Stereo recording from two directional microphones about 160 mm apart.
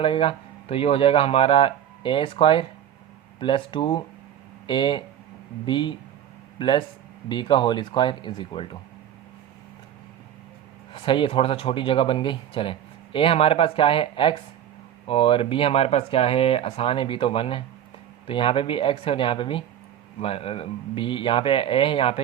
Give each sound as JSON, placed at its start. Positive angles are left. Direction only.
{"t": 0.0, "sound": "speech", "side_deg": 35}
{"t": 10.9, "sound": "speech", "side_deg": 30}